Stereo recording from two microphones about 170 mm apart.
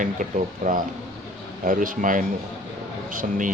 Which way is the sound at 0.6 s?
50° right (ahead or behind).